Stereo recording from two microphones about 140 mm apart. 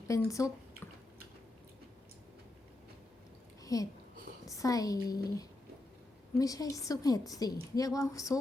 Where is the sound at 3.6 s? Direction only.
25° left (ahead or behind).